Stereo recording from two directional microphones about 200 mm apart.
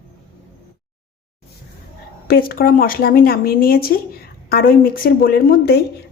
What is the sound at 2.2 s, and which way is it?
A woman's voice, 45° left (ahead or behind).